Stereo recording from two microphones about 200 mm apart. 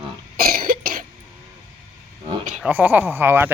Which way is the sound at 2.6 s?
10° right (ahead or behind).